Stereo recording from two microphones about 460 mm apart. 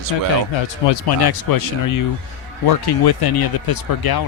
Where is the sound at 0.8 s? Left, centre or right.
Left.